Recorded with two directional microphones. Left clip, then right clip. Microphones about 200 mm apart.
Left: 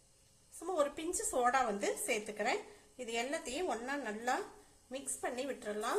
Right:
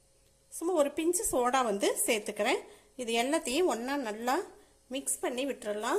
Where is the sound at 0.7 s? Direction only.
30° right (ahead or behind).